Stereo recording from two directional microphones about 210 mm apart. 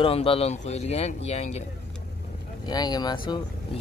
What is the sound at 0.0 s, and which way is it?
Speech, 25° left (ahead or behind).